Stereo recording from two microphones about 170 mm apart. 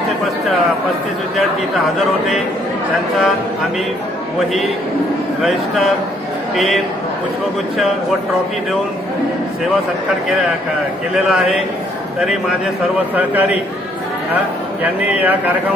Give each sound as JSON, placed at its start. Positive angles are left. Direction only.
{"t": 6.5, "sound": "a man's voice", "side_deg": 0}
{"t": 13.1, "sound": "speech", "side_deg": -10}
{"t": 14.8, "sound": "speech", "side_deg": -10}